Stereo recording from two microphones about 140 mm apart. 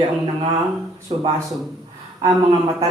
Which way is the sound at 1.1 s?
40° right (ahead or behind).